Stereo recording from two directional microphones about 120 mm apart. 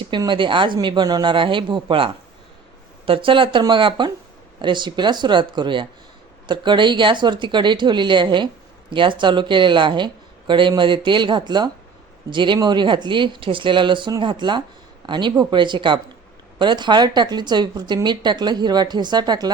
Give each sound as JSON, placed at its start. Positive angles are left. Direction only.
{"t": 0.3, "sound": "speech", "side_deg": -45}